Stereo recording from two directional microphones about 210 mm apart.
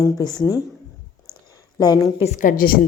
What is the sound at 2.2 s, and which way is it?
Speech, 35° left (ahead or behind).